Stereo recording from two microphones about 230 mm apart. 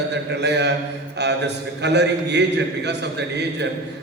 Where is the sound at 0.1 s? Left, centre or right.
Right.